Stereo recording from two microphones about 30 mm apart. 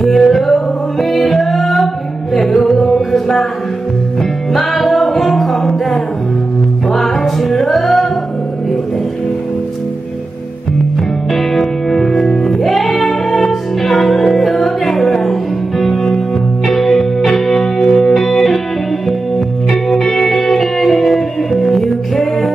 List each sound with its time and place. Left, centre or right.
0.0 s music: centre
2.7 s music: centre
6.9 s music: centre
11.3 s music: centre
19.9 s music: centre